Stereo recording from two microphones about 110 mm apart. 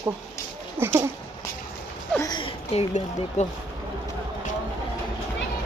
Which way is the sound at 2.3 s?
55° left (ahead or behind).